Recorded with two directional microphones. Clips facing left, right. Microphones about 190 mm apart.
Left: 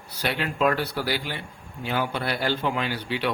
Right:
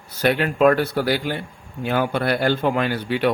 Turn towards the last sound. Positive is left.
turn(degrees=-50)  # may be behind; listen again after turning